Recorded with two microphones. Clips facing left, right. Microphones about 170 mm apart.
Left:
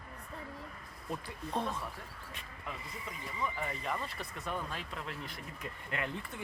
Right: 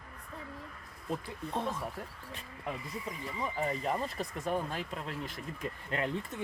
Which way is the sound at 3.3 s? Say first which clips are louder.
Right 4 dB; 35° right (ahead or behind).